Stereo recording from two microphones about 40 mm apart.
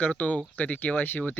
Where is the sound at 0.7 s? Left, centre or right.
Left.